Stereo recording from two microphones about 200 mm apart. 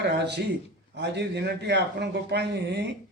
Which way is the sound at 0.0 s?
60° right (ahead or behind).